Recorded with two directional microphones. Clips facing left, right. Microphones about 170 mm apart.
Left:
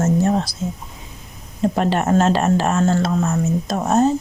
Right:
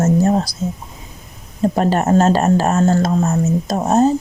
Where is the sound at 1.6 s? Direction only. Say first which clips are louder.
Right 2 dB; 40° right (ahead or behind).